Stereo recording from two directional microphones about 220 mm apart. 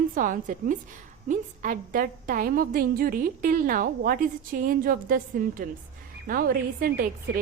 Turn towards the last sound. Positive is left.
turn(degrees=-40)  # may be behind; listen again after turning